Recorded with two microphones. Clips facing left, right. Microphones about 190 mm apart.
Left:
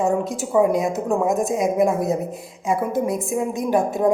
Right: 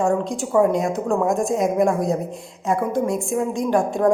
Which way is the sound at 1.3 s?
Centre (ahead or behind).